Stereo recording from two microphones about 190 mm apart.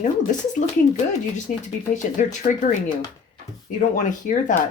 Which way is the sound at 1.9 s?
40° left (ahead or behind).